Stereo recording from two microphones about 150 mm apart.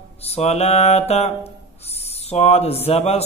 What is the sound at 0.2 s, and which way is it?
A man's voice, 45° left (ahead or behind).